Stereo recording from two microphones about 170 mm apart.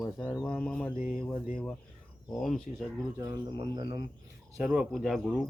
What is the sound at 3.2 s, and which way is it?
Speech, 25° right (ahead or behind).